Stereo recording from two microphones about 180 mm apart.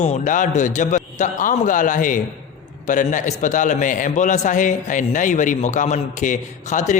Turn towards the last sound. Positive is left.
turn(degrees=40)  # may be behind; listen again after turning